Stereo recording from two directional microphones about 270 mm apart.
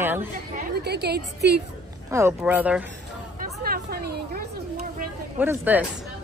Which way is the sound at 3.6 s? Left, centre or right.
Right.